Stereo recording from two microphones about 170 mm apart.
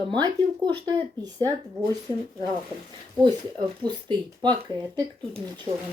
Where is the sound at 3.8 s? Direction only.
25° right (ahead or behind).